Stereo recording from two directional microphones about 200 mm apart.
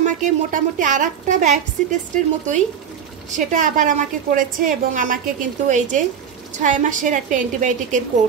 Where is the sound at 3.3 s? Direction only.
40° right (ahead or behind).